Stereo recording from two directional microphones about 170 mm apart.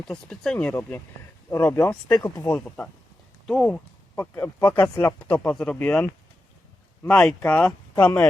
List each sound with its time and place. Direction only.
0.0 s speech: 5° left (ahead or behind)
2.3 s speech: 20° left (ahead or behind)